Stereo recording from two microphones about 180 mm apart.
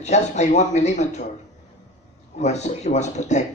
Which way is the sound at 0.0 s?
40° left (ahead or behind).